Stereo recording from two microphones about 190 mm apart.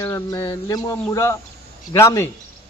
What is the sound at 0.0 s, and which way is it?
Speech, 15° left (ahead or behind).